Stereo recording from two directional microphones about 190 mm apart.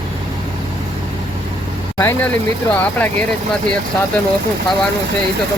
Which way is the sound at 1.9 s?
10° left (ahead or behind).